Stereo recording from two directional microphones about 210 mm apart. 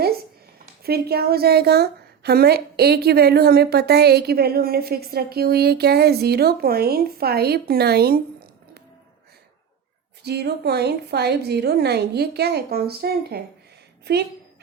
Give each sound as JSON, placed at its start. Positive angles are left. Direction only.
{"t": 0.6, "sound": "a woman's voice", "side_deg": -45}
{"t": 10.2, "sound": "a woman's voice", "side_deg": -50}